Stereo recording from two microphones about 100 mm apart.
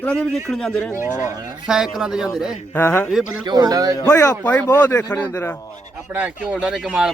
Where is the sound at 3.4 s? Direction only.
45° right (ahead or behind).